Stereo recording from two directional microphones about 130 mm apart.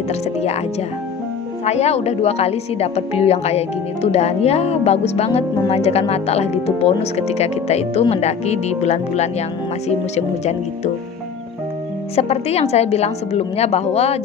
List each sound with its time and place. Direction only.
0.1 s a woman's voice: 55° left (ahead or behind)
12.2 s a woman's voice: 55° left (ahead or behind)